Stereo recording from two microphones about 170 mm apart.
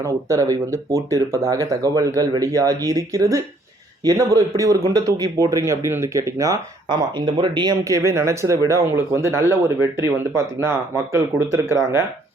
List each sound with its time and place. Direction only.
0.0 s speech: 20° right (ahead or behind)